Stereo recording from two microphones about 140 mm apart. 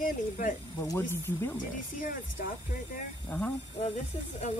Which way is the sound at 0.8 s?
20° left (ahead or behind).